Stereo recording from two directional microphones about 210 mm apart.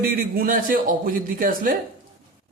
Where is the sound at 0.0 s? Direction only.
45° right (ahead or behind).